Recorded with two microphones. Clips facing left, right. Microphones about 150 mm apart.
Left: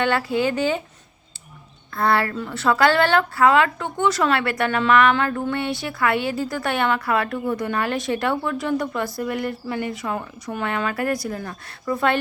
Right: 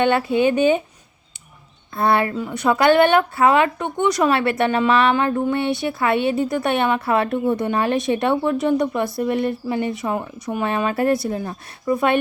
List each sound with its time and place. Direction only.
0.0 s a woman's voice: 20° right (ahead or behind)
2.0 s a woman's voice: 20° right (ahead or behind)